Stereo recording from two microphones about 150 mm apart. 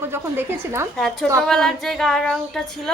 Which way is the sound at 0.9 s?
Centre (ahead or behind).